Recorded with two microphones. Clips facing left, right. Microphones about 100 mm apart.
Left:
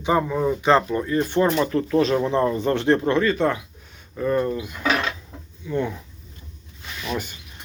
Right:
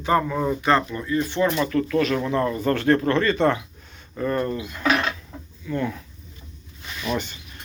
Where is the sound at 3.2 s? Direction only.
5° left (ahead or behind).